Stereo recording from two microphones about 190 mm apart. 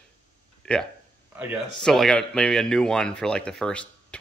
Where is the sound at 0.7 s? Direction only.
5° left (ahead or behind).